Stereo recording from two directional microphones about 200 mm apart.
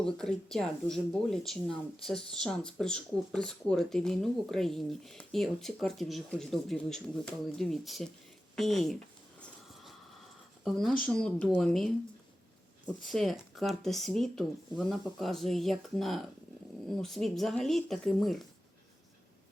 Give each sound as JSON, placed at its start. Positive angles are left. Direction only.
{"t": 0.0, "sound": "speech", "side_deg": 5}
{"t": 10.6, "sound": "speech", "side_deg": 0}
{"t": 12.9, "sound": "speech", "side_deg": 0}